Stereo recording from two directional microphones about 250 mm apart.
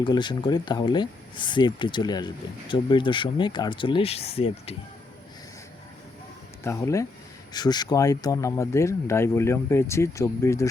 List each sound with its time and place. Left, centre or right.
0.0 s speech: centre
6.7 s speech: centre